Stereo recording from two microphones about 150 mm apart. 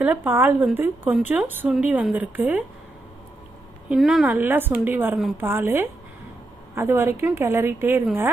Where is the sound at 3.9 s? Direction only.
5° right (ahead or behind).